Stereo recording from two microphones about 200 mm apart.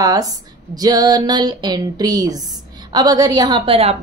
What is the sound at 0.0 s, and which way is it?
A woman's voice, 20° right (ahead or behind).